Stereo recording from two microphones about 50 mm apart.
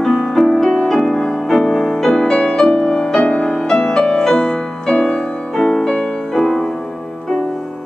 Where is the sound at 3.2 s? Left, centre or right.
Left.